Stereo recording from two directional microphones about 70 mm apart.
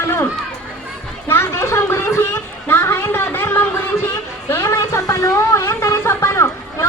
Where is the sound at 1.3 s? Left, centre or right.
Left.